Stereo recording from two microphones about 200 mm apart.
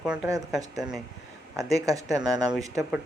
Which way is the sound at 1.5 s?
15° right (ahead or behind).